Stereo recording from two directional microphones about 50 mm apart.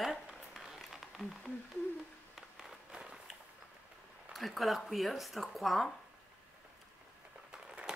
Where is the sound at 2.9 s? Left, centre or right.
Centre.